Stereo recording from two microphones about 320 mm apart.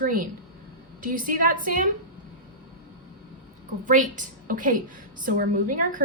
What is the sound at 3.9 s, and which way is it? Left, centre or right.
A woman's voice, right.